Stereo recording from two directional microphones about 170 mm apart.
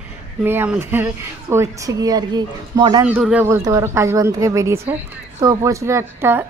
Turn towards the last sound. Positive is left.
turn(degrees=-15)  # may be behind; listen again after turning